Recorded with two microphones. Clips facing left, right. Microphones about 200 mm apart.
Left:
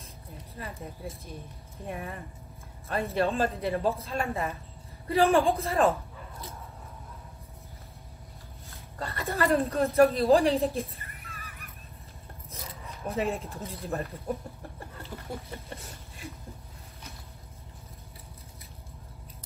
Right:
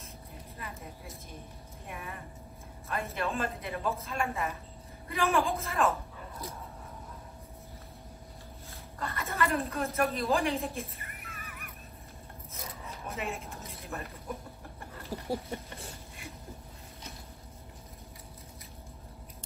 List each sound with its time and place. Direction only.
0.6 s a woman's voice: 30° left (ahead or behind)
9.0 s a woman's voice: 30° left (ahead or behind)
13.1 s a woman's voice: 30° left (ahead or behind)
15.1 s a sound: 35° right (ahead or behind)